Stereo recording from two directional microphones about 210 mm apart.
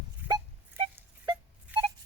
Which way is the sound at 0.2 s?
10° right (ahead or behind).